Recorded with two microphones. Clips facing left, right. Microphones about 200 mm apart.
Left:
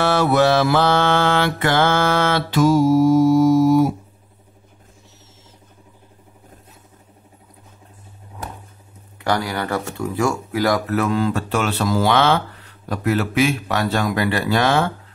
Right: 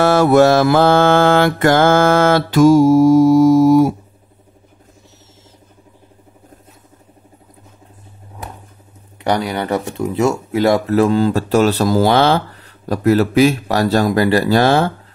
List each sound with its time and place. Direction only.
0.0 s mantra: 45° right (ahead or behind)
9.2 s speech: 20° right (ahead or behind)